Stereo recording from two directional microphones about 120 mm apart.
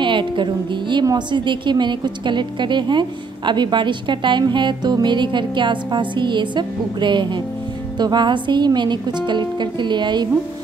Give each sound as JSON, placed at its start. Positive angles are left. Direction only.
{"t": 0.0, "sound": "a woman's voice", "side_deg": -40}